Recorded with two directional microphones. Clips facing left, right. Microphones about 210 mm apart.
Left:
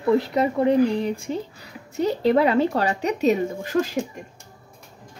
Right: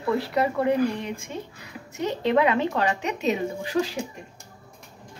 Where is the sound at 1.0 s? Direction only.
35° left (ahead or behind).